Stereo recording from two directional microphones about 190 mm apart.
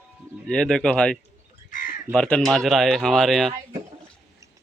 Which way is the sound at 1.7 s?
45° left (ahead or behind).